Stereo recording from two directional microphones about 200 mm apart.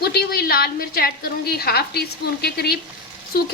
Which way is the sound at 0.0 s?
50° left (ahead or behind).